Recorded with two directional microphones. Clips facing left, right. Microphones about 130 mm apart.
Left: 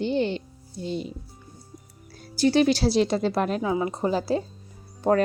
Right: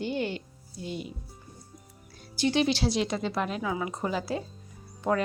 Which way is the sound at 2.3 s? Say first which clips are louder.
Left 6 dB; 40° left (ahead or behind).